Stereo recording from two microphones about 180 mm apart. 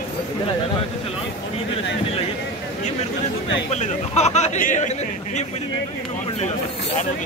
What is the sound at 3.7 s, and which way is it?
Speech, 40° left (ahead or behind).